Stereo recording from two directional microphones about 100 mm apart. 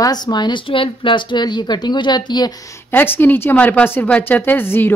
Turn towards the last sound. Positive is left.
turn(degrees=20)  # may be behind; listen again after turning